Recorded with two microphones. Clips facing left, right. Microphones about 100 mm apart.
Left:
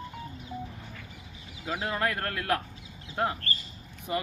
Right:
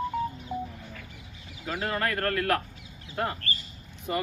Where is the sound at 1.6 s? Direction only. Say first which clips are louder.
Right 1 dB; 15° left (ahead or behind).